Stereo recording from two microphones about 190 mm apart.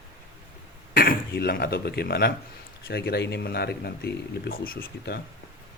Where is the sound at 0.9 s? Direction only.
50° left (ahead or behind).